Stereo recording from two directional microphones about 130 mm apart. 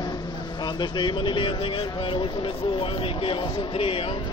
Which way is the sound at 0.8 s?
35° left (ahead or behind).